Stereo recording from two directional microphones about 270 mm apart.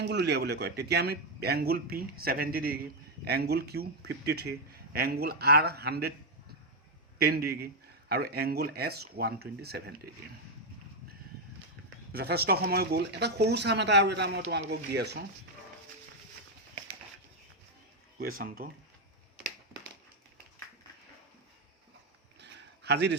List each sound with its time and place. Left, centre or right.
0.0 s speech: right
7.2 s speech: right
12.1 s speech: right
18.2 s speech: right
22.4 s a sound: right